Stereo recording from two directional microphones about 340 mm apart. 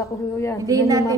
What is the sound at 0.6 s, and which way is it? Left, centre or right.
Speech, centre.